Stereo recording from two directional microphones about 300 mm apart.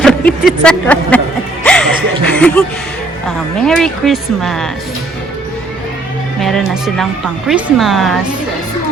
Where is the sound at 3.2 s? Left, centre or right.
Centre.